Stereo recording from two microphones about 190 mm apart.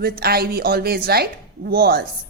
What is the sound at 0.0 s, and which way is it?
A woman's voice, 55° right (ahead or behind).